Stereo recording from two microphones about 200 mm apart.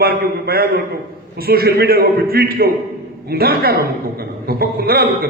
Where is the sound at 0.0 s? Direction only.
50° right (ahead or behind).